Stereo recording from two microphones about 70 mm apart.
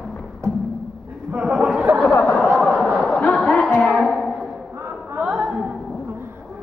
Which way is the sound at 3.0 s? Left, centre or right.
Centre.